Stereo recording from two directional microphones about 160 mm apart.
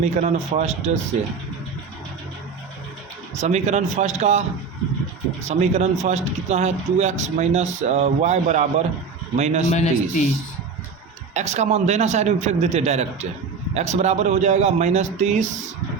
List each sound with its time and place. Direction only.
0.0 s speech: 45° right (ahead or behind)
3.4 s speech: 45° right (ahead or behind)
9.6 s a man's voice: 45° left (ahead or behind)
11.3 s speech: 45° right (ahead or behind)